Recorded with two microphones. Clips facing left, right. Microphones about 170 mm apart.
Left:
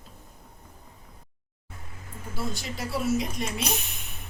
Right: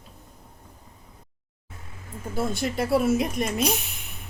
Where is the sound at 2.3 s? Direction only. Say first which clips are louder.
Right 8 dB; 55° right (ahead or behind).